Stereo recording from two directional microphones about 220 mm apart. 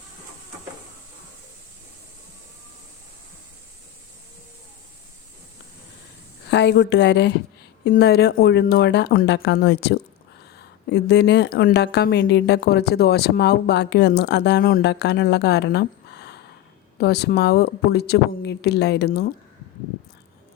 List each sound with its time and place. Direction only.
6.5 s a woman's voice: 50° left (ahead or behind)